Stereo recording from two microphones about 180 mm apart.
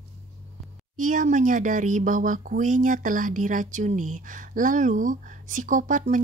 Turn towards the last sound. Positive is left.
turn(degrees=-45)  # may be behind; listen again after turning